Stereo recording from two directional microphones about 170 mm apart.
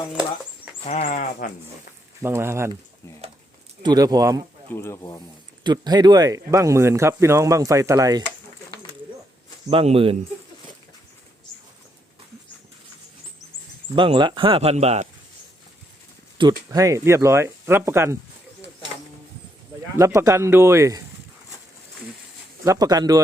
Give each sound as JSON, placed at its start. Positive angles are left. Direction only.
{"t": 1.0, "sound": "speech", "side_deg": 50}
{"t": 2.2, "sound": "speech", "side_deg": -15}
{"t": 3.8, "sound": "speech", "side_deg": -20}
{"t": 4.7, "sound": "speech", "side_deg": 15}
{"t": 5.6, "sound": "speech", "side_deg": -25}
{"t": 9.6, "sound": "speech", "side_deg": -35}
{"t": 13.9, "sound": "speech", "side_deg": -30}
{"t": 16.6, "sound": "speech", "side_deg": -20}
{"t": 20.1, "sound": "speech", "side_deg": -15}
{"t": 22.6, "sound": "speech", "side_deg": -20}